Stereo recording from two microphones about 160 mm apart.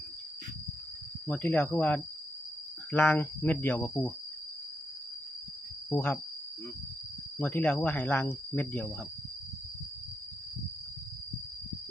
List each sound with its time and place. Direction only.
1.3 s speech: 10° left (ahead or behind)
5.9 s speech: 10° left (ahead or behind)
7.3 s speech: 10° left (ahead or behind)